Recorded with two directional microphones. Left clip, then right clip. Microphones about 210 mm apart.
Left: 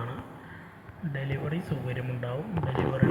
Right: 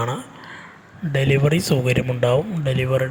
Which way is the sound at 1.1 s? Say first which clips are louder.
Right 16 dB; 55° right (ahead or behind).